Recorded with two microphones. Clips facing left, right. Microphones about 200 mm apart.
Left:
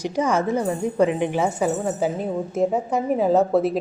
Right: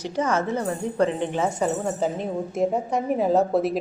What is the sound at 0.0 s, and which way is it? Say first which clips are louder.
A woman's voice: left 3 dB; 10° left (ahead or behind).